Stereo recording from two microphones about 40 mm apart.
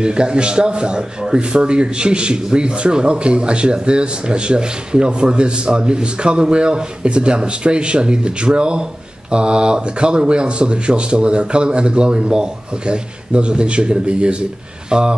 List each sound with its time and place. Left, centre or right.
0.0 s a man's voice: right